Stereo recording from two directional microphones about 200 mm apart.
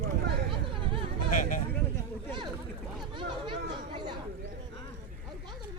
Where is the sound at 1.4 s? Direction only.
40° left (ahead or behind).